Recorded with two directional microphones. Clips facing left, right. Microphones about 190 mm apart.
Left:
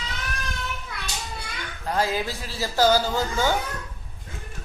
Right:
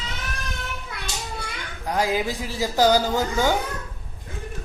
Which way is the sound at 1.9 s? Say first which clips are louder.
Right 2 dB; 15° right (ahead or behind).